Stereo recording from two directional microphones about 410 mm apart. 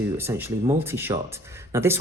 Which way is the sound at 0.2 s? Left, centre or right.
Centre.